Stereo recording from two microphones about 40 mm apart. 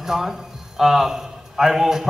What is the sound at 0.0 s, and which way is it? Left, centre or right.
A man's voice, centre.